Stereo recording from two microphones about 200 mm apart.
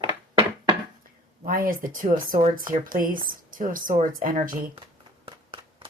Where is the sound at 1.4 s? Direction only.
45° right (ahead or behind).